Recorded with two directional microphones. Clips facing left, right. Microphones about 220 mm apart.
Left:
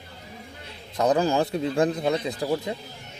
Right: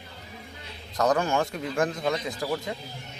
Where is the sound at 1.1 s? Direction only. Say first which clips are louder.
Left 6 dB; 35° left (ahead or behind).